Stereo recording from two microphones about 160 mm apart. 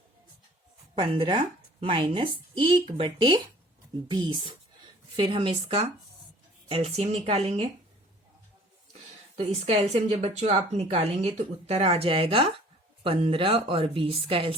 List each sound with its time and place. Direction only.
0.9 s speech: 35° right (ahead or behind)
9.3 s speech: 45° right (ahead or behind)